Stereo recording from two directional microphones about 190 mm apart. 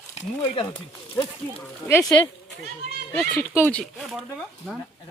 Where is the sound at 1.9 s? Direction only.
20° left (ahead or behind).